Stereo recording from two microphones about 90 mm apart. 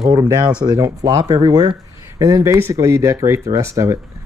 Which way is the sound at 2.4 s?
30° right (ahead or behind).